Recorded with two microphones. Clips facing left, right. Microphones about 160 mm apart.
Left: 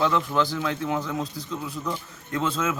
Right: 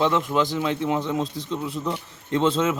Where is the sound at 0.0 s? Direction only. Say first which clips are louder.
Right 2 dB; 20° right (ahead or behind).